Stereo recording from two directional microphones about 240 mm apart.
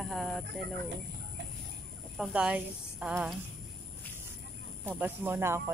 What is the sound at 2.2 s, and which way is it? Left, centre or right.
Speech, centre.